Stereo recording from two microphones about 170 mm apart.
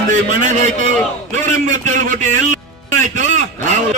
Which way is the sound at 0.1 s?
45° right (ahead or behind).